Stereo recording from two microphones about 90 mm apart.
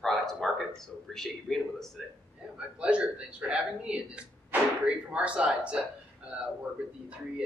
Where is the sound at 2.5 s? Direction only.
10° right (ahead or behind).